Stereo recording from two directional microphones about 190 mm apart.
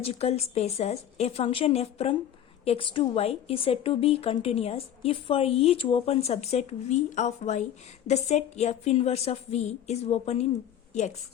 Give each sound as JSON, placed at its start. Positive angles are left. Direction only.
{"t": 0.0, "sound": "speech", "side_deg": 35}